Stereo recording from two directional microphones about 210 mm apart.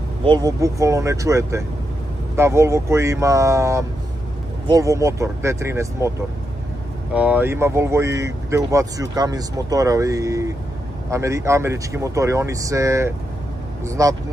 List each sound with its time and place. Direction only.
0.2 s speech: 20° right (ahead or behind)
7.2 s speech: 5° right (ahead or behind)